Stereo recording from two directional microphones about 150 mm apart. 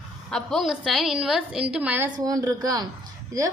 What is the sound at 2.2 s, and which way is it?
Speech, 25° right (ahead or behind).